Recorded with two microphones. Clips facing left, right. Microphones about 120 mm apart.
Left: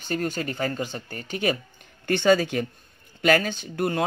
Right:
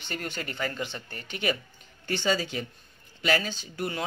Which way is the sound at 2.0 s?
55° left (ahead or behind).